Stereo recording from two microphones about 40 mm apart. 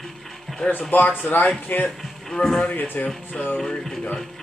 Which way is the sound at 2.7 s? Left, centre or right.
Left.